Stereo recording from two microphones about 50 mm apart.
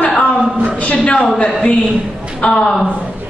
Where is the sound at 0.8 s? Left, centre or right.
Left.